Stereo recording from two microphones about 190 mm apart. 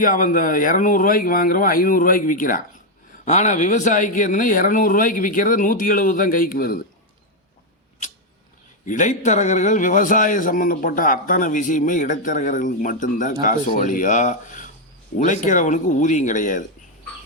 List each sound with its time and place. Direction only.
0.0 s a man's voice: 45° left (ahead or behind)
8.9 s a man's voice: 40° left (ahead or behind)